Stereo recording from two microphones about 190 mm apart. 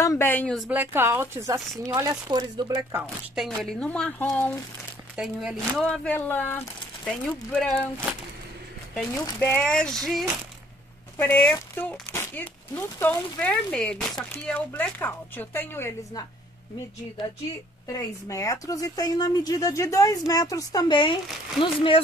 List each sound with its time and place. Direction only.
0.0 s speech: 15° left (ahead or behind)
0.7 s speech: 10° right (ahead or behind)
1.7 s speech: centre (ahead or behind)
2.2 s speech: 25° right (ahead or behind)
2.9 s speech: 10° right (ahead or behind)
3.4 s speech: 5° left (ahead or behind)
5.1 s speech: 5° right (ahead or behind)
9.4 s speech: 5° left (ahead or behind)
17.9 s speech: 15° left (ahead or behind)